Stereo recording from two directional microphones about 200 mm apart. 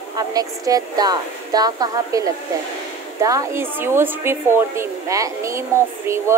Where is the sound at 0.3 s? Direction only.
20° right (ahead or behind).